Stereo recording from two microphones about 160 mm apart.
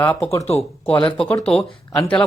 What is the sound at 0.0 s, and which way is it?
Speech, 10° left (ahead or behind).